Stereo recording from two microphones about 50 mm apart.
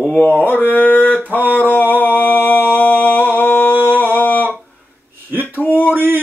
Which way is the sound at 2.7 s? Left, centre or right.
Left.